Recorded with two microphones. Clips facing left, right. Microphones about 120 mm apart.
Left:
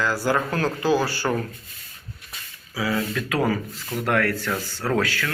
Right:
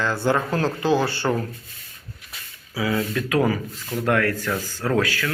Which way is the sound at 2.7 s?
25° right (ahead or behind).